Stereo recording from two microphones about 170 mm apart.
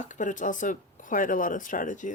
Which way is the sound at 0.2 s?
50° left (ahead or behind).